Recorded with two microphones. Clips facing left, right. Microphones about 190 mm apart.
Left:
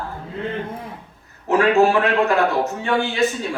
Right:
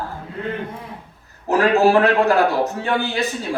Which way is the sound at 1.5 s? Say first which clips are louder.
Right 1 dB; 35° right (ahead or behind).